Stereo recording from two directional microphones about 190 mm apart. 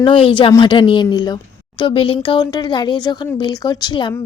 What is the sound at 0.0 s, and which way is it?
Speech, 25° left (ahead or behind).